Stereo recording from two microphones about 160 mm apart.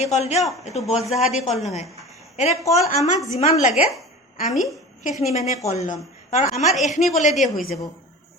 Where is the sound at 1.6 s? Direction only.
45° left (ahead or behind).